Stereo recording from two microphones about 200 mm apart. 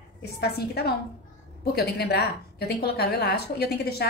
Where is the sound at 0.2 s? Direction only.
55° left (ahead or behind).